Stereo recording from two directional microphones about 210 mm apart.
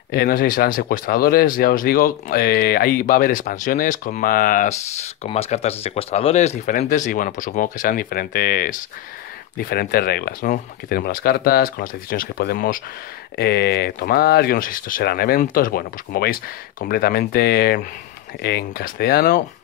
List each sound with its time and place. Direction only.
0.1 s speech: 45° left (ahead or behind)